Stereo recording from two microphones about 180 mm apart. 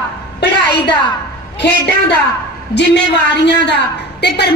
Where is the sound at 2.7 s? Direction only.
75° left (ahead or behind).